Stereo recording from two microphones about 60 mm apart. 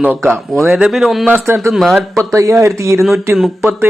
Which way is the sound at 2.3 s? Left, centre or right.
Right.